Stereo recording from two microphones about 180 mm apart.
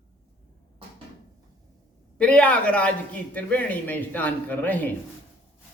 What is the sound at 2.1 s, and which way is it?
A man's voice, 5° left (ahead or behind).